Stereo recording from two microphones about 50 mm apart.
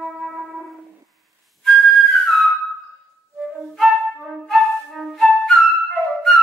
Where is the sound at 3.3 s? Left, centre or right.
Centre.